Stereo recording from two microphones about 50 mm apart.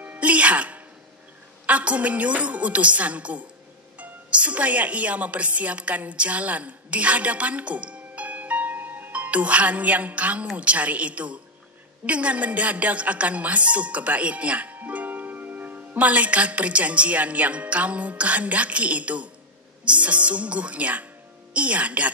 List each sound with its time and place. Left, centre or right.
0.0 s music: right
1.7 s a woman's voice: right